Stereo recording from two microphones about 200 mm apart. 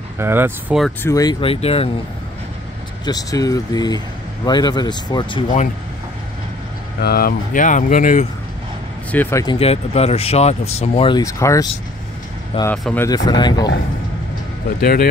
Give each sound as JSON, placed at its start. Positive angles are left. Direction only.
{"t": 0.2, "sound": "speech", "side_deg": -10}
{"t": 1.0, "sound": "speech", "side_deg": 20}
{"t": 3.1, "sound": "speech", "side_deg": 20}
{"t": 7.0, "sound": "speech", "side_deg": 50}
{"t": 9.1, "sound": "speech", "side_deg": 10}
{"t": 9.6, "sound": "speech", "side_deg": 30}
{"t": 12.7, "sound": "speech", "side_deg": 0}
{"t": 13.0, "sound": "speech", "side_deg": 20}
{"t": 14.8, "sound": "speech", "side_deg": 50}